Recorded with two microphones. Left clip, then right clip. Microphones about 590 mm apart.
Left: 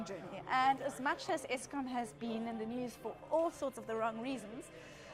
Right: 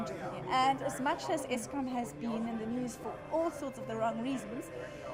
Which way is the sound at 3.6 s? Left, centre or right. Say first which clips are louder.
Right 2 dB; left.